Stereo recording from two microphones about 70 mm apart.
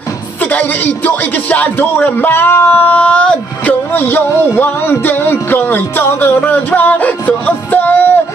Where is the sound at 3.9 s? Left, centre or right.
Left.